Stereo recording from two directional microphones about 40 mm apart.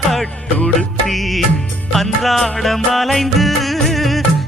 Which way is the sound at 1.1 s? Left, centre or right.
Centre.